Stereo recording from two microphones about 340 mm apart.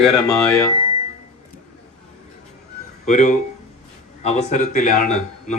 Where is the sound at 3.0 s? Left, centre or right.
Left.